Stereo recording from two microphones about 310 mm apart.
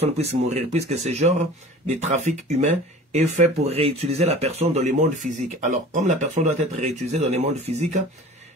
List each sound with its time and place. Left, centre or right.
0.0 s speech: centre